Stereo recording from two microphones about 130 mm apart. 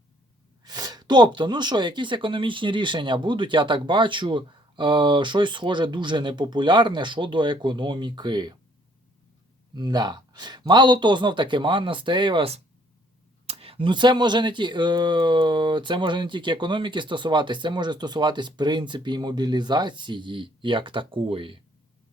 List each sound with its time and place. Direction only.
0.6 s speech: 30° right (ahead or behind)
9.7 s speech: 35° right (ahead or behind)
13.5 s speech: 50° right (ahead or behind)